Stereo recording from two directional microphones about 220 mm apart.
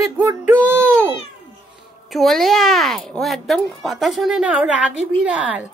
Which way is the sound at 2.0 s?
Centre (ahead or behind).